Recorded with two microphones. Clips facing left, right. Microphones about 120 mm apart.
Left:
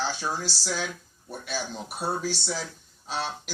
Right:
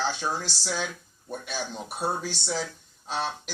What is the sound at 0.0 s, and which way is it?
Speech, 20° right (ahead or behind).